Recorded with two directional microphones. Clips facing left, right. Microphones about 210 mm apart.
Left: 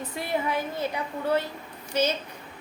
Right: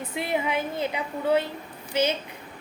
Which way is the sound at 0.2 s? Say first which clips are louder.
Right 1 dB; 20° right (ahead or behind).